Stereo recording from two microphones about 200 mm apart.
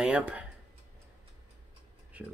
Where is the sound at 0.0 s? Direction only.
5° right (ahead or behind).